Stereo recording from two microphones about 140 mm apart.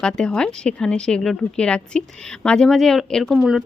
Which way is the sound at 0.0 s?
5° left (ahead or behind).